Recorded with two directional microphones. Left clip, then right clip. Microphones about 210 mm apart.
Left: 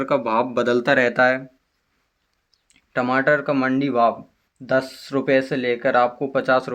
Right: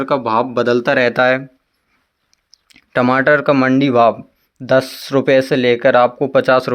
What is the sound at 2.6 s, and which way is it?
Speech, 40° right (ahead or behind).